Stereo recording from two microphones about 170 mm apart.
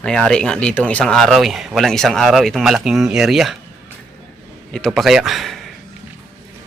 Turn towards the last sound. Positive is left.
turn(degrees=0)  # may be behind; listen again after turning